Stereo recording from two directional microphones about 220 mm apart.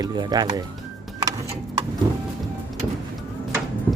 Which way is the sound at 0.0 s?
20° right (ahead or behind).